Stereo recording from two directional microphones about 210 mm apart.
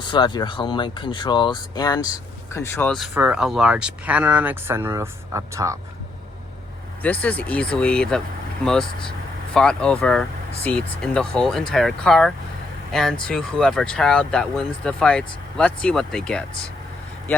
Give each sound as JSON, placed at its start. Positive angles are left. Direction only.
{"t": 0.0, "sound": "speech", "side_deg": 20}
{"t": 7.0, "sound": "speech", "side_deg": 5}